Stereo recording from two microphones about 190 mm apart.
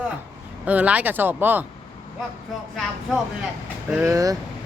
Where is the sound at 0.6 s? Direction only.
5° right (ahead or behind).